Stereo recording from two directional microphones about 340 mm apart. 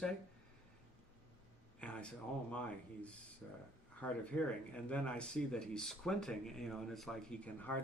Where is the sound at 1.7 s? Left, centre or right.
Centre.